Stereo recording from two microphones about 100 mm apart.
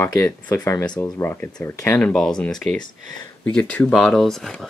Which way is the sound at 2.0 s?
5° left (ahead or behind).